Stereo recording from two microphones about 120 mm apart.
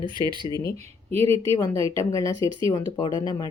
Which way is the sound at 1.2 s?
25° left (ahead or behind).